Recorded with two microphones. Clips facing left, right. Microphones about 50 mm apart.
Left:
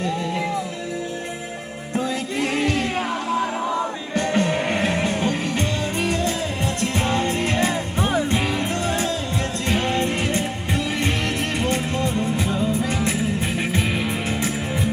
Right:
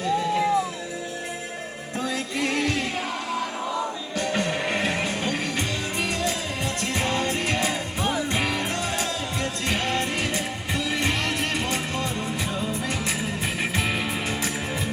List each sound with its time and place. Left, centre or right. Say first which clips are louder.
2.4 s music: left 3 dB; left
8.4 s music: left 2 dB; centre
8.9 s music: left 4 dB; left
11.3 s music: left 3 dB; left
13.6 s music: left 3 dB; centre